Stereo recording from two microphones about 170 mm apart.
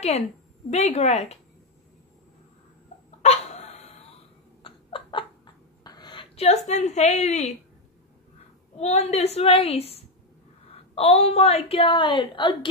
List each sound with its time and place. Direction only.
0.7 s a woman's voice: 40° left (ahead or behind)
3.2 s dog: 40° left (ahead or behind)
4.6 s a sound: 30° left (ahead or behind)
5.9 s a woman's voice: 25° left (ahead or behind); by 7.5 s 40° left (ahead or behind)
8.7 s a woman's voice: 40° left (ahead or behind)